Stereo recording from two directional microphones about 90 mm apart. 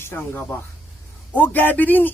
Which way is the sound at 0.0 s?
25° left (ahead or behind).